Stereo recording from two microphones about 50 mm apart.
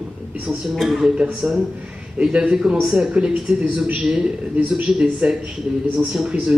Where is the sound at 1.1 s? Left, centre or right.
Right.